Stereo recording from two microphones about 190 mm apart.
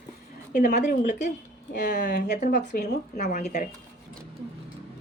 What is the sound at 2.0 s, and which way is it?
Speech, 65° left (ahead or behind).